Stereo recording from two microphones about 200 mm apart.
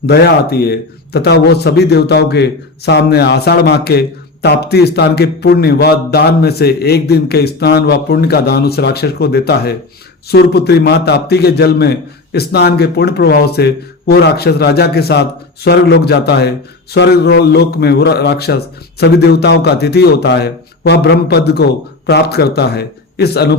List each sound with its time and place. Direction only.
0.0 s a man's voice: 50° left (ahead or behind)